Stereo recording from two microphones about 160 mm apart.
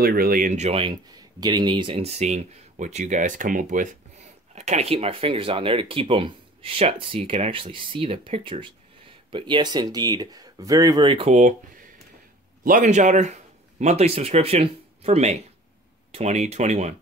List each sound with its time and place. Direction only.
0.0 s speech: 65° right (ahead or behind); by 11.3 s 35° right (ahead or behind)
12.6 s speech: 50° right (ahead or behind)